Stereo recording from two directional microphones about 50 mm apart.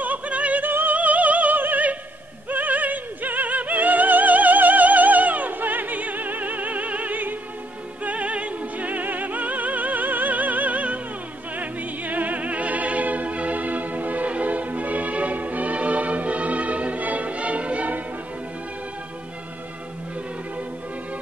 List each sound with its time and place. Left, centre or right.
0.0 s opera: right
2.5 s music: right